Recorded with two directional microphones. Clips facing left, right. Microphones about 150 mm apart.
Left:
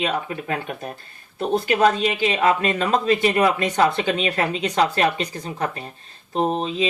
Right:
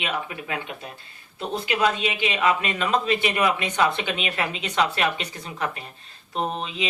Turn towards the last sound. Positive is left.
turn(degrees=35)  # may be behind; listen again after turning